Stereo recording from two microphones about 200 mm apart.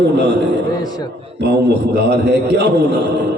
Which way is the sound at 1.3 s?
55° right (ahead or behind).